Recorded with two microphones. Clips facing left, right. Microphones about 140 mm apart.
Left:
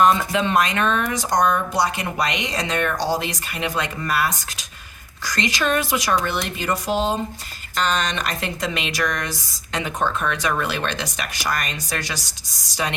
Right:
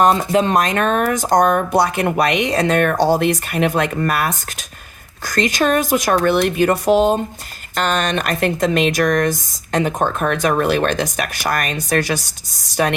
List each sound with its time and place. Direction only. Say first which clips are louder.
0.0 s speech: right 4 dB; 35° right (ahead or behind); by 12.9 s 55° right (ahead or behind)